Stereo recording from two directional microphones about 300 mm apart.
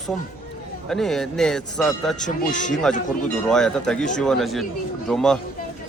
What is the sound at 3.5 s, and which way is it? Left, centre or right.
A man's voice, centre.